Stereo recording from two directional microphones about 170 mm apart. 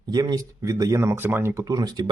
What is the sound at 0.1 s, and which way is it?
Speech, 25° right (ahead or behind).